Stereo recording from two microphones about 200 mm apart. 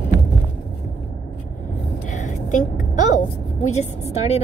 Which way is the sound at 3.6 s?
35° left (ahead or behind).